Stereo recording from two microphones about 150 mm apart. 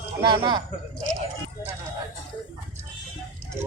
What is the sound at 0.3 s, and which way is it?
Speech, 30° right (ahead or behind).